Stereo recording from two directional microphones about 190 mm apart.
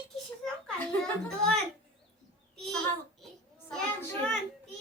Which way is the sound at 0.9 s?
5° left (ahead or behind).